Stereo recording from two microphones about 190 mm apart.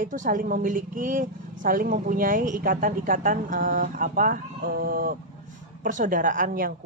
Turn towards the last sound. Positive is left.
turn(degrees=-45)  # may be behind; listen again after turning